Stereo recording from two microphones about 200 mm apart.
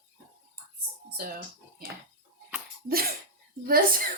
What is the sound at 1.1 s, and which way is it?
Speech, 45° right (ahead or behind).